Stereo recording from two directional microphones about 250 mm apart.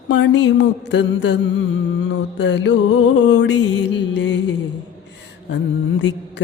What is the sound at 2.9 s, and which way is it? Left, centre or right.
Music, left.